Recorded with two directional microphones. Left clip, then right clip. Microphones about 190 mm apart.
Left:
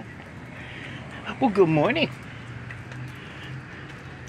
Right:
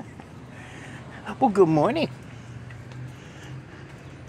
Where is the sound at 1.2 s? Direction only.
20° right (ahead or behind).